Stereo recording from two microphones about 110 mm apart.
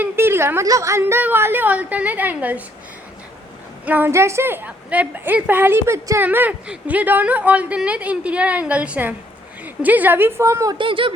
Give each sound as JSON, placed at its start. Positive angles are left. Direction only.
{"t": 0.0, "sound": "a woman's voice", "side_deg": -20}
{"t": 3.8, "sound": "a woman's voice", "side_deg": -15}
{"t": 10.8, "sound": "speech", "side_deg": -50}